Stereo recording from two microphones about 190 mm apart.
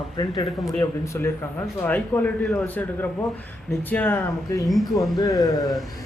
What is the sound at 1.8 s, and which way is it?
A man's voice, 10° left (ahead or behind).